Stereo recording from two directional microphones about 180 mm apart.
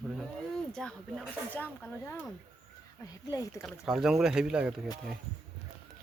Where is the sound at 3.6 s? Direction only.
5° right (ahead or behind).